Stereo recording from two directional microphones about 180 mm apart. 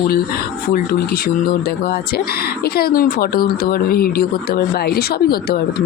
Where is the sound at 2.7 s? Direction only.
55° left (ahead or behind).